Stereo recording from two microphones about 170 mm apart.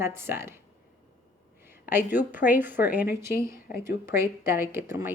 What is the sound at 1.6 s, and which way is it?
A woman's voice, 10° right (ahead or behind).